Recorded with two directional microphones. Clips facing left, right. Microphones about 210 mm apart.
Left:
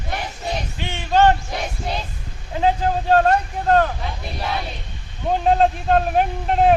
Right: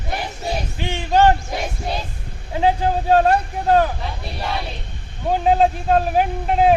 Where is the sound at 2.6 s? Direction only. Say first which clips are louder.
Right 1 dB; 10° right (ahead or behind).